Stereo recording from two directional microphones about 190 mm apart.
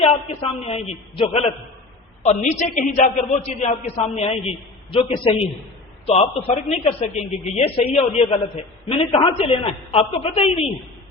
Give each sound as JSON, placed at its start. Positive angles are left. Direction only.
{"t": 0.0, "sound": "a man's voice", "side_deg": 35}